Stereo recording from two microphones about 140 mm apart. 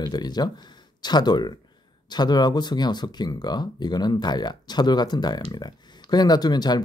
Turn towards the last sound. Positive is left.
turn(degrees=30)  # may be behind; listen again after turning